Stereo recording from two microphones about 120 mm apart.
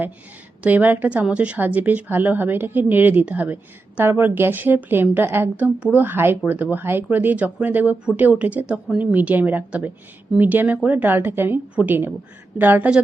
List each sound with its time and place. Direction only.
0.6 s a woman's voice: 15° right (ahead or behind)